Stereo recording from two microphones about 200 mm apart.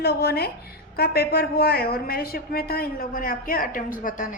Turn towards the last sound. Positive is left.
turn(degrees=40)  # may be behind; listen again after turning